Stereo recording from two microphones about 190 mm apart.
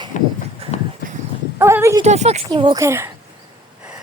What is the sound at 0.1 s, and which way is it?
Clip-clop, 40° left (ahead or behind).